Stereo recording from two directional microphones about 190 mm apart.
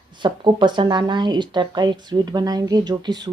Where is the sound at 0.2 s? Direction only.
25° right (ahead or behind).